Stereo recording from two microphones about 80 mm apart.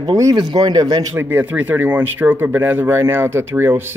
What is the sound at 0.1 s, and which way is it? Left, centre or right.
Speech, right.